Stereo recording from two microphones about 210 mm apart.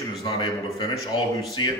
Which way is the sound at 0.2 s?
20° left (ahead or behind).